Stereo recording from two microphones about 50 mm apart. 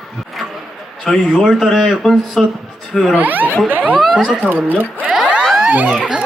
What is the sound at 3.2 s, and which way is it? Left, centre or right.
Speech, right.